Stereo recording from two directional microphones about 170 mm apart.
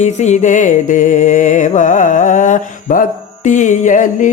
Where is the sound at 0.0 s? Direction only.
40° left (ahead or behind).